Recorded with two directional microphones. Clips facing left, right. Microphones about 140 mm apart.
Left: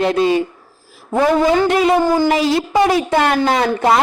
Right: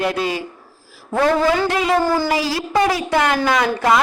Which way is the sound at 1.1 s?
15° left (ahead or behind).